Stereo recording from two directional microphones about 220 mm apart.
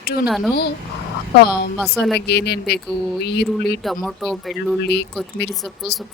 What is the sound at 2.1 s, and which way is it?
Speech, 50° left (ahead or behind).